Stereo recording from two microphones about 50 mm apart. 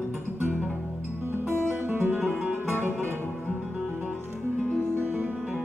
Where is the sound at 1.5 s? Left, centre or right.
Right.